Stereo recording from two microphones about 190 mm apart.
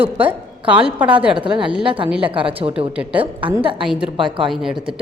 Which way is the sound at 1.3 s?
25° right (ahead or behind).